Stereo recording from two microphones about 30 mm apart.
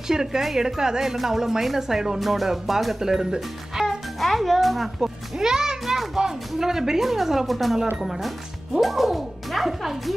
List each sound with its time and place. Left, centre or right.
0.1 s speech: centre
1.1 s speech: centre
2.1 s speech: centre
4.2 s speech: centre
5.0 s a child's voice: centre
5.9 s speech: centre